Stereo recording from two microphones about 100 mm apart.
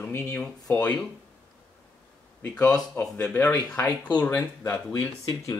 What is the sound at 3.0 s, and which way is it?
Speech, 10° left (ahead or behind).